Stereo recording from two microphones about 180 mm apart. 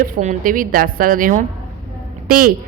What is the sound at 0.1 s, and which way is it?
A woman's voice, 45° right (ahead or behind).